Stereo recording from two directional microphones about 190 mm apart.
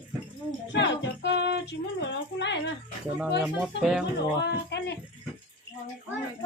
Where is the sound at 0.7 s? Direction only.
65° left (ahead or behind).